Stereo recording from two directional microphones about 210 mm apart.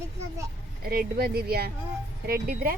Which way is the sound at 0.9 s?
45° right (ahead or behind).